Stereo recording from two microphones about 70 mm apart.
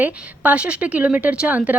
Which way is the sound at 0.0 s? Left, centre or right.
Right.